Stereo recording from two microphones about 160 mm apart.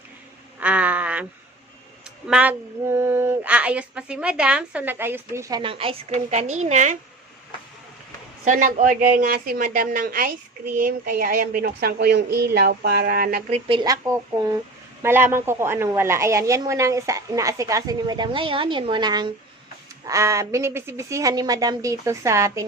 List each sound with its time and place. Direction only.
0.6 s a sound: 10° right (ahead or behind)
2.2 s speech: 5° right (ahead or behind)
5.6 s a woman's voice: 35° right (ahead or behind)
8.4 s a woman's voice: 50° right (ahead or behind)
13.5 s speech: 35° right (ahead or behind)
13.8 s a woman's voice: 20° right (ahead or behind)